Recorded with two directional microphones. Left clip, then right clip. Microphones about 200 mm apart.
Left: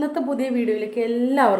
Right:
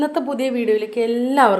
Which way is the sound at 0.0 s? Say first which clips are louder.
Right 3 dB; 10° right (ahead or behind).